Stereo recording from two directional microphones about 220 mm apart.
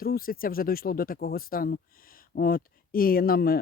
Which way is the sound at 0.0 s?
40° left (ahead or behind).